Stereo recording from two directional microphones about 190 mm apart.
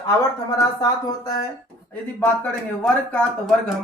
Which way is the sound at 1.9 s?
10° left (ahead or behind).